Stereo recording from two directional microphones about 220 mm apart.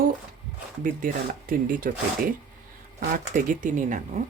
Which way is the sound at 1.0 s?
40° right (ahead or behind).